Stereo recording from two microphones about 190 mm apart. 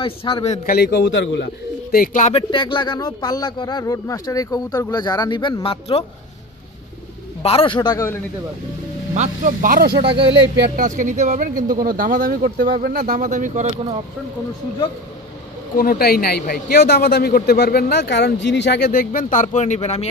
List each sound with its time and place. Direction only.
0.0 s speech: 30° left (ahead or behind)
0.7 s a man's voice: 55° left (ahead or behind)
2.3 s speech: 25° left (ahead or behind)
7.4 s speech: 30° left (ahead or behind)
9.1 s speech: 40° right (ahead or behind)
9.9 s speech: 25° right (ahead or behind)
10.8 s speech: 40° right (ahead or behind)
15.7 s speech: 50° left (ahead or behind); by 20.1 s 35° left (ahead or behind)